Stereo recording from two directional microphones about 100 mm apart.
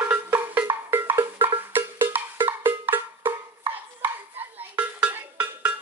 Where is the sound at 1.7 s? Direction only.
20° right (ahead or behind).